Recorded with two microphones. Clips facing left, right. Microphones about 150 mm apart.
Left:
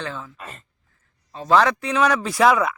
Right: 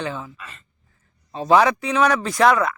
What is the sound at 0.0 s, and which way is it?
Speech, 10° right (ahead or behind).